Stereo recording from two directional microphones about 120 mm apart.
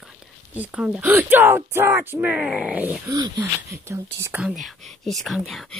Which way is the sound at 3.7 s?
25° right (ahead or behind).